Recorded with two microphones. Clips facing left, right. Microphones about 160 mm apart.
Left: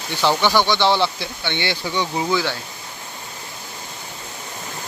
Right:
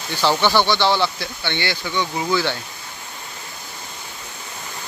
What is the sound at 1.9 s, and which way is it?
Speech, 30° left (ahead or behind).